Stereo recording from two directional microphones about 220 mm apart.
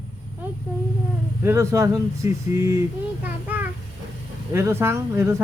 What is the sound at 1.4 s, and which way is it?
A child's voice, 10° right (ahead or behind).